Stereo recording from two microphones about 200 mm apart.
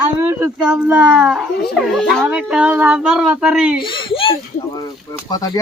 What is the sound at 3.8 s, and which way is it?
Speech, 25° left (ahead or behind).